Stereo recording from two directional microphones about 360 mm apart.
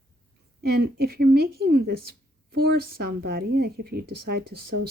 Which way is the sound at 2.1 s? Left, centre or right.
Right.